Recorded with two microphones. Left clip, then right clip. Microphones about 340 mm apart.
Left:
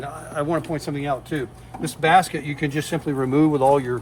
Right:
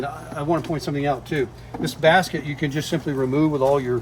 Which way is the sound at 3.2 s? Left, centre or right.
Left.